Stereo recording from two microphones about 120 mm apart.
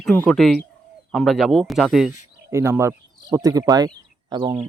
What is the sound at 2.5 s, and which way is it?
Speech, 25° right (ahead or behind).